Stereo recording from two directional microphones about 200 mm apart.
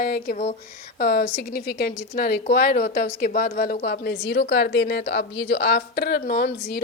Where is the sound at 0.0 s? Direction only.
45° left (ahead or behind).